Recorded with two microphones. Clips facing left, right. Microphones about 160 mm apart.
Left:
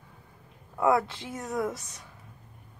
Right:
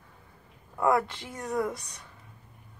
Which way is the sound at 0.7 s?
5° left (ahead or behind).